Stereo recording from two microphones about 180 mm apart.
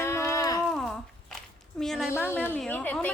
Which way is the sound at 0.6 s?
Centre (ahead or behind).